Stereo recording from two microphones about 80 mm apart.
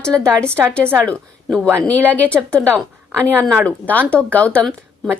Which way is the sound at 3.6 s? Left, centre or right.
Centre.